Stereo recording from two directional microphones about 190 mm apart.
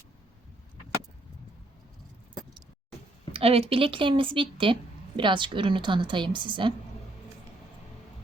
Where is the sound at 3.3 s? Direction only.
30° right (ahead or behind).